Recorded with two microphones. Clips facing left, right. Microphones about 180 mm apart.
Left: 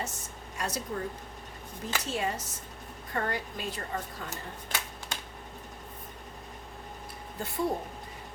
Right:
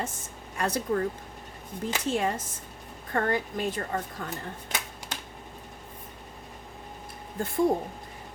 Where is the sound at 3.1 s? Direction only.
50° right (ahead or behind).